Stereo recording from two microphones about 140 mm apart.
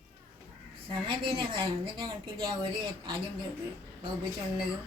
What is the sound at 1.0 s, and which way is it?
A woman's voice, 35° right (ahead or behind).